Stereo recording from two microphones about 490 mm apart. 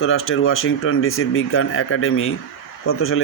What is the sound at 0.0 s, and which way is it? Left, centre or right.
Speech, left.